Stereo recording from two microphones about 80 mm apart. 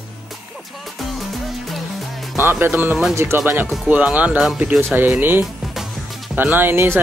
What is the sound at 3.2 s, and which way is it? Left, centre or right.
Speech, right.